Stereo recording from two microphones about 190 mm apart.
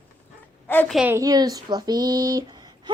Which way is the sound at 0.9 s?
10° right (ahead or behind).